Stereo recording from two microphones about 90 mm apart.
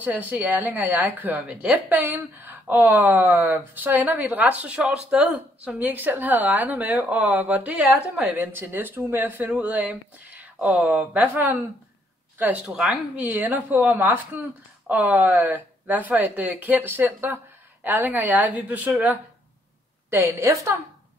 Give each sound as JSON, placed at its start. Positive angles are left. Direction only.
{"t": 0.0, "sound": "a woman's voice", "side_deg": -20}
{"t": 1.9, "sound": "speech", "side_deg": -25}
{"t": 12.7, "sound": "speech", "side_deg": -5}
{"t": 20.1, "sound": "a woman's voice", "side_deg": -30}